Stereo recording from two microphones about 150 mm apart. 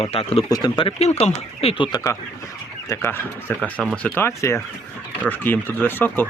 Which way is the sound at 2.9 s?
15° left (ahead or behind).